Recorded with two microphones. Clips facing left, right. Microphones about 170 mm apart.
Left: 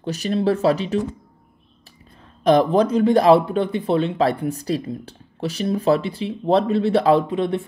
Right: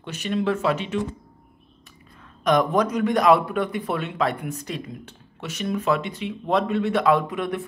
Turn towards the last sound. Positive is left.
turn(degrees=30)  # may be behind; listen again after turning